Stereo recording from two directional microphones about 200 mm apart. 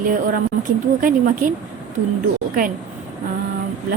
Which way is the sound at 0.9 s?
45° right (ahead or behind).